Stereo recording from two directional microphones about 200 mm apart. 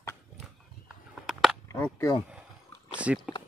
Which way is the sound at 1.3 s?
Centre (ahead or behind).